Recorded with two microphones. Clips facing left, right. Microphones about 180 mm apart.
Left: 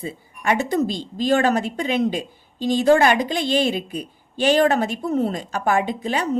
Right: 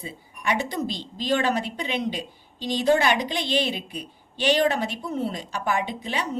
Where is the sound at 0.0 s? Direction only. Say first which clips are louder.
Left 4 dB; 45° left (ahead or behind).